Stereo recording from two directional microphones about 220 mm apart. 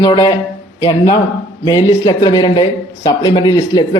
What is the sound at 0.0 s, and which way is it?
Speech, 20° left (ahead or behind).